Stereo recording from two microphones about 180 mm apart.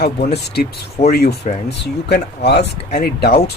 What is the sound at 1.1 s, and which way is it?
Speech, 60° left (ahead or behind).